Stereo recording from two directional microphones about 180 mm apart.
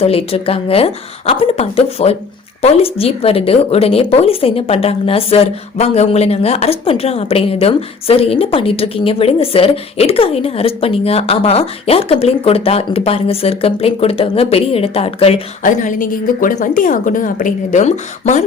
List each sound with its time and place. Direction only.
0.0 s speech: 35° left (ahead or behind)
15.6 s a woman's voice: 45° left (ahead or behind)